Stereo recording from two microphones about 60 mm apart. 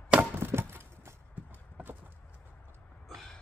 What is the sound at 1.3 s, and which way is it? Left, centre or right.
Clip-clop, right.